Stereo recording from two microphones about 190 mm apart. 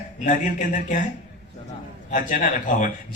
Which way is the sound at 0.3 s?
40° left (ahead or behind).